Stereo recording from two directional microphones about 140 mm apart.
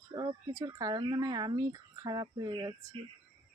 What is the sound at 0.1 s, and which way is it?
Speech, 25° right (ahead or behind).